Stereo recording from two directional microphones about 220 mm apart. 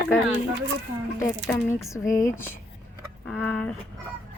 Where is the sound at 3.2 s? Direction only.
5° left (ahead or behind).